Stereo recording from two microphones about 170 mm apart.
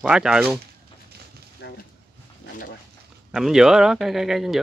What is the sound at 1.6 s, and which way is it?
Speech, 90° left.